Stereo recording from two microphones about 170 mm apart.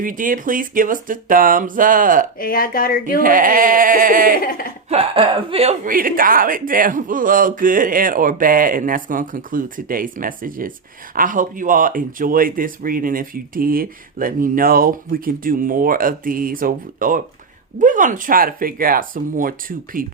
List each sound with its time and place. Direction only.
0.0 s speech: 55° right (ahead or behind)
2.4 s speech: 60° left (ahead or behind)
3.2 s speech: 55° right (ahead or behind)
4.4 s speech: 55° left (ahead or behind)
4.9 s speech: 35° right (ahead or behind)
5.8 s speech: 55° right (ahead or behind)